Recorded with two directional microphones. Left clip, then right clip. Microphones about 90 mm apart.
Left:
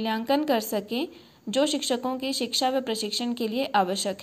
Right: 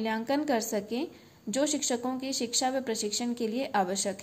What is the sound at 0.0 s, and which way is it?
A woman's voice, 20° left (ahead or behind).